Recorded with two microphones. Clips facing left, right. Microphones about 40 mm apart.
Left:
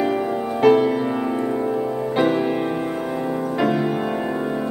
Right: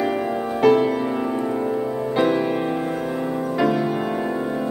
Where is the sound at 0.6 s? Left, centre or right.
Centre.